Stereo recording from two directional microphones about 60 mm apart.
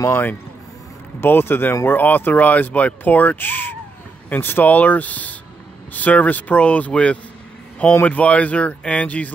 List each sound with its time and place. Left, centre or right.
0.1 s speech: left